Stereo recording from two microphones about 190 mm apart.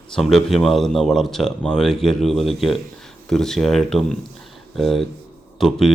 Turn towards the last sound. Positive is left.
turn(degrees=0)  # may be behind; listen again after turning